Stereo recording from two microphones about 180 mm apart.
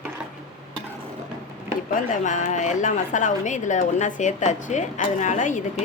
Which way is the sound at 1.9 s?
45° left (ahead or behind).